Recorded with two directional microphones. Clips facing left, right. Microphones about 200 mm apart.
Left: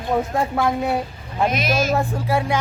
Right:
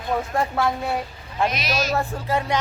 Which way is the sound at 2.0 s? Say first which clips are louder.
Left 3 dB; 10° left (ahead or behind).